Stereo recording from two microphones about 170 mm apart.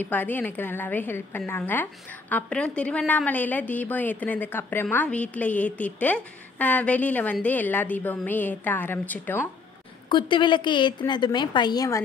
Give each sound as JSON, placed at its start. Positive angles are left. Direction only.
{"t": 0.0, "sound": "a woman's voice", "side_deg": 10}
{"t": 10.0, "sound": "a woman's voice", "side_deg": 30}